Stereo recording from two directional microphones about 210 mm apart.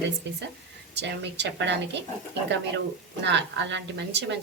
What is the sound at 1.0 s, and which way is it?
Speech, 55° right (ahead or behind).